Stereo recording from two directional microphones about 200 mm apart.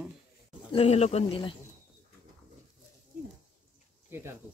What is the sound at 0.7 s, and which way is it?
Speech, 30° left (ahead or behind).